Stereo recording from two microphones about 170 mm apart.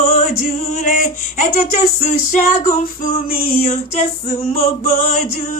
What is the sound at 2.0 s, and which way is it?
Female singing, 45° left (ahead or behind).